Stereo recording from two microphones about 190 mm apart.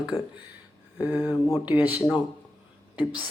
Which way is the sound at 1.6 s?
10° right (ahead or behind).